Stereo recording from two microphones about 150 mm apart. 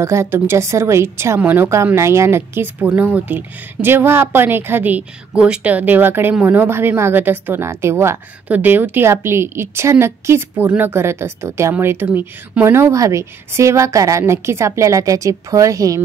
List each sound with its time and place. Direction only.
0.0 s a woman's voice: 20° right (ahead or behind)